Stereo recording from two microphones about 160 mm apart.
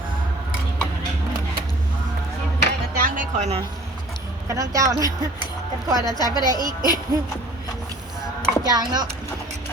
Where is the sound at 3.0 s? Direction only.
55° right (ahead or behind).